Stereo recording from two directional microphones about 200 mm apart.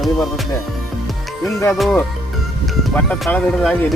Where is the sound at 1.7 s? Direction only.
Centre (ahead or behind).